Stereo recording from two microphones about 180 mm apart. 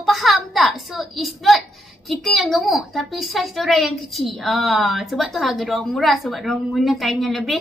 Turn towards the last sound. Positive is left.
turn(degrees=0)  # may be behind; listen again after turning